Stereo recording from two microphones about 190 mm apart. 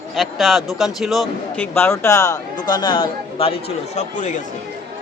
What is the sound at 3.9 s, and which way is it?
Speech, 40° left (ahead or behind).